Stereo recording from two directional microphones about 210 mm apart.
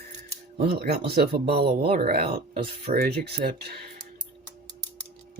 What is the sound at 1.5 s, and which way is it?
Speech, 25° right (ahead or behind).